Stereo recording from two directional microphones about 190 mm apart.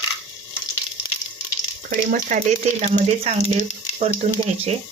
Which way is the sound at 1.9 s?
50° right (ahead or behind).